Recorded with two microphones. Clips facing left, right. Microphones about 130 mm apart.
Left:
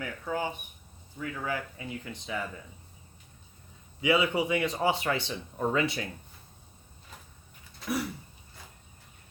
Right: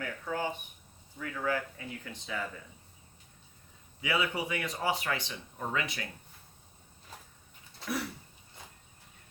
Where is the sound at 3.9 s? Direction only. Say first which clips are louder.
Left 6 dB; 20° left (ahead or behind).